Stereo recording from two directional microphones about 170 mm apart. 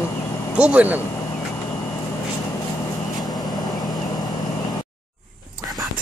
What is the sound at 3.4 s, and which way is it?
Vehicle, 25° left (ahead or behind).